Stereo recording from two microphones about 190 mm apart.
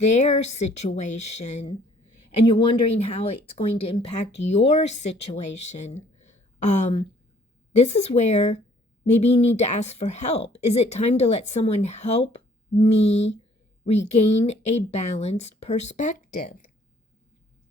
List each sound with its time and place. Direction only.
0.0 s speech: 35° left (ahead or behind)
2.5 s speech: 25° left (ahead or behind); by 16.7 s 45° left (ahead or behind)